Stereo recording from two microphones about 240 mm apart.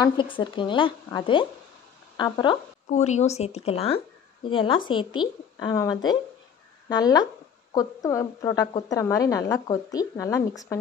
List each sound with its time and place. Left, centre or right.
0.0 s a woman's voice: centre
2.9 s a woman's voice: left; by 10.8 s centre